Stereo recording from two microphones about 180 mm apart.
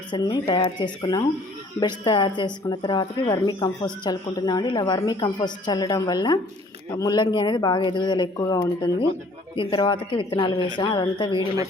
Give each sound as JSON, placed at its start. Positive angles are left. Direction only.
{"t": 0.1, "sound": "speech", "side_deg": 25}